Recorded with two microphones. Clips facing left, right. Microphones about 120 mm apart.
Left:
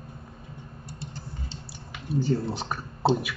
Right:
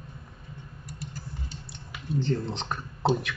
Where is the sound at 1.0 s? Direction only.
25° left (ahead or behind).